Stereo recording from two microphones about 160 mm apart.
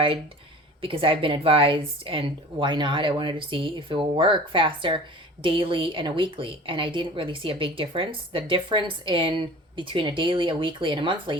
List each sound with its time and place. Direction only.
0.8 s a woman's voice: 35° right (ahead or behind)